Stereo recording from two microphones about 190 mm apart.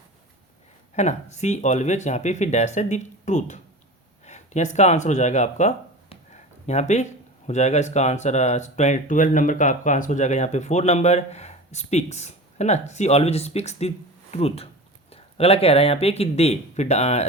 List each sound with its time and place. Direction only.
0.9 s speech: 35° left (ahead or behind)